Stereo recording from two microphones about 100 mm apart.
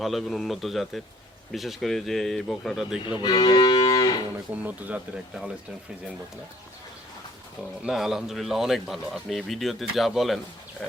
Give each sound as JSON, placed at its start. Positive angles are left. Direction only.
{"t": 0.0, "sound": "speech", "side_deg": 0}
{"t": 3.2, "sound": "cattle", "side_deg": 45}
{"t": 4.5, "sound": "speech", "side_deg": -15}
{"t": 7.9, "sound": "speech", "side_deg": -5}